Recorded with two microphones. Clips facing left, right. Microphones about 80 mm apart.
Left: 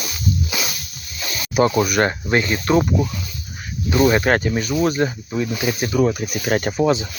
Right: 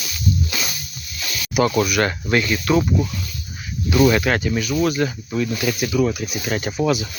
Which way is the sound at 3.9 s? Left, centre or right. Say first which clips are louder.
Left 1 dB; left.